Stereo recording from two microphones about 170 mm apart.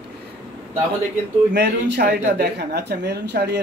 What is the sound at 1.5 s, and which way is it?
Speech, 80° right.